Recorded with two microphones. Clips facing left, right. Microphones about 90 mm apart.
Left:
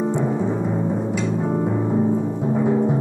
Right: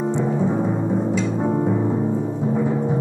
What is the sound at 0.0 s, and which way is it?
Timpani, centre (ahead or behind).